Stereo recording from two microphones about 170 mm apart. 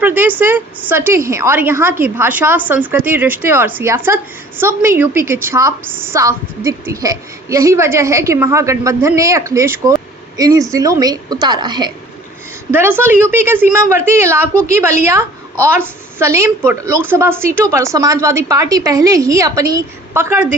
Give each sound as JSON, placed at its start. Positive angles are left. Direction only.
{"t": 0.0, "sound": "a woman's voice", "side_deg": -10}
{"t": 12.7, "sound": "a woman's voice", "side_deg": -10}
{"t": 16.1, "sound": "a woman's voice", "side_deg": -15}